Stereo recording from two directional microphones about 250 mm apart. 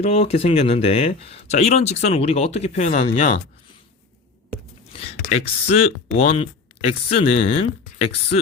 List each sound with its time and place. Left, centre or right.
0.0 s speech: left
5.1 s speech: left